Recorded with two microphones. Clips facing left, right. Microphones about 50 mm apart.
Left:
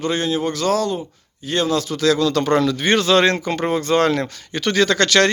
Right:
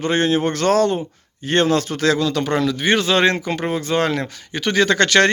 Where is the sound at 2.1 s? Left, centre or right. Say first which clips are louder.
Left 2 dB; centre.